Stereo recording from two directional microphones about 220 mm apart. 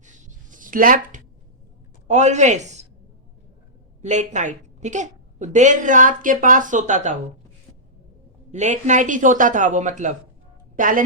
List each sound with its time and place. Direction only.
0.0 s writing: 35° right (ahead or behind)
2.0 s speech: 30° right (ahead or behind)
4.0 s a woman's voice: 35° right (ahead or behind)
8.5 s a woman's voice: 35° right (ahead or behind)